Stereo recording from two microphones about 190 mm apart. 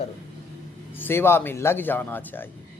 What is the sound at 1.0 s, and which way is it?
Speech, 10° left (ahead or behind).